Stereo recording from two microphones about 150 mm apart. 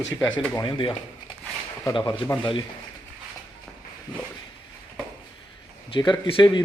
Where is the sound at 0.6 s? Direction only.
35° left (ahead or behind).